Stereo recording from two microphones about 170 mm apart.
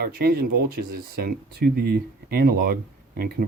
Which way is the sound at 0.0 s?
60° right (ahead or behind).